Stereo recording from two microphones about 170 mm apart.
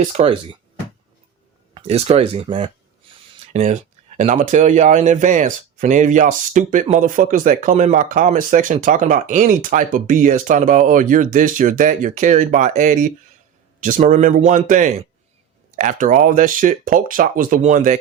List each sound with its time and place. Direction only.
0.2 s speech: 35° right (ahead or behind)
1.7 s speech: 35° right (ahead or behind)